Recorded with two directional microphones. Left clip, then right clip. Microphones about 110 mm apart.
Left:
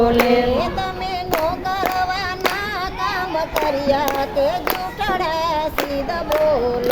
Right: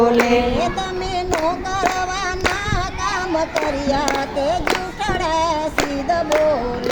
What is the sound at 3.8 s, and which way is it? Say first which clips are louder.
Music: left 1 dB; 25° left (ahead or behind).